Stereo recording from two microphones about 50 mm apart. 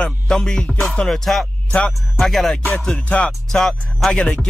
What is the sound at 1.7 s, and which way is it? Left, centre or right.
Music, left.